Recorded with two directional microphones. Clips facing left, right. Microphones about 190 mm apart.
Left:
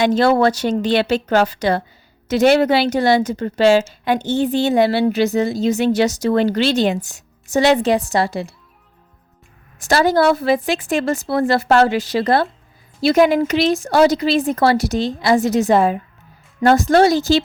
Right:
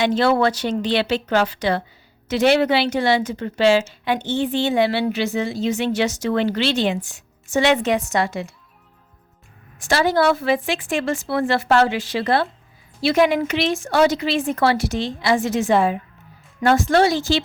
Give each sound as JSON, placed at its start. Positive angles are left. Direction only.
{"t": 0.0, "sound": "a woman's voice", "side_deg": 45}
{"t": 9.7, "sound": "a woman's voice", "side_deg": 40}